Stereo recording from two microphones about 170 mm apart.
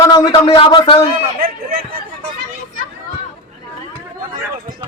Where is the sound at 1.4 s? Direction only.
55° right (ahead or behind).